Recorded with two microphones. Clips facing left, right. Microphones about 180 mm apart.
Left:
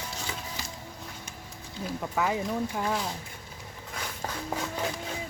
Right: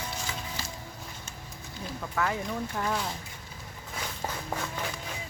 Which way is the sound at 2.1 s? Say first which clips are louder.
Left 2 dB; 15° left (ahead or behind).